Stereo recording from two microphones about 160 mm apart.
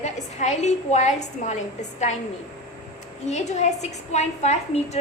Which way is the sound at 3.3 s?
45° left (ahead or behind).